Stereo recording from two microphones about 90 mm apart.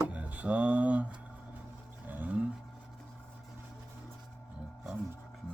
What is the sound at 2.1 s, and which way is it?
Roaring cats, 20° right (ahead or behind).